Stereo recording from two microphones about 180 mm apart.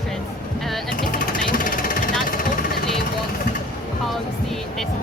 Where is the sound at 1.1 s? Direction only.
50° left (ahead or behind).